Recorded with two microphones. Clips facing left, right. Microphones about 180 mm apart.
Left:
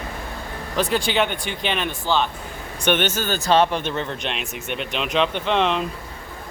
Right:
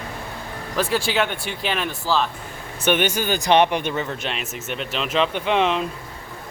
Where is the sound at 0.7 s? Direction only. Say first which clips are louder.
Left 1 dB; 5° right (ahead or behind).